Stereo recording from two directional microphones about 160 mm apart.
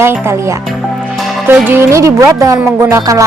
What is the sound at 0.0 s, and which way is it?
A woman's voice, 15° right (ahead or behind).